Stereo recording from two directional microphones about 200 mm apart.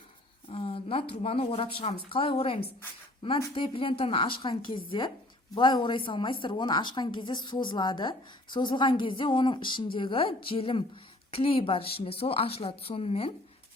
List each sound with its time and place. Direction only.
0.4 s a woman's voice: 30° left (ahead or behind)